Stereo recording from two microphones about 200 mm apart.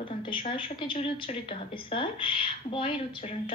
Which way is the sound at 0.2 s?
25° left (ahead or behind).